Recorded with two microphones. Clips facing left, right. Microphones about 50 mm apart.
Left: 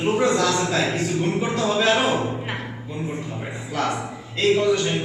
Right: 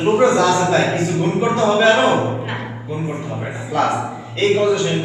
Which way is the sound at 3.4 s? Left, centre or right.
Centre.